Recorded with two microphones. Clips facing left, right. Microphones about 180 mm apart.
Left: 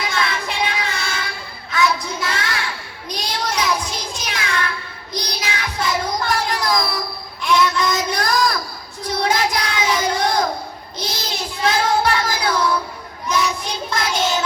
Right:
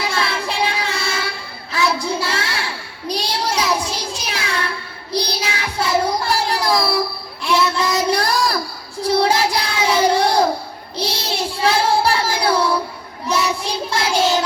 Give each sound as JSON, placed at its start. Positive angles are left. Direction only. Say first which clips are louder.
{"t": 0.0, "sound": "child singing", "louder": "right 1 dB", "side_deg": -30}